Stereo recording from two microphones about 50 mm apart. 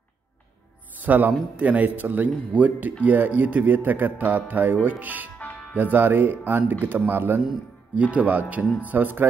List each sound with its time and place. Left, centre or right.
1.0 s a man's voice: right
5.4 s music: left
5.8 s speech: right
8.0 s a man's voice: right